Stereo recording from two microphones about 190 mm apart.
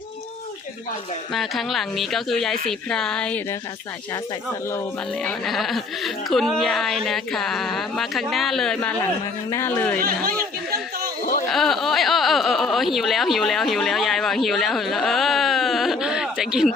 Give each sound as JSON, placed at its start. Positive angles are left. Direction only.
{"t": 1.3, "sound": "speech", "side_deg": 0}
{"t": 4.7, "sound": "speech", "side_deg": 5}
{"t": 10.2, "sound": "a sound", "side_deg": -55}
{"t": 11.5, "sound": "speech", "side_deg": 0}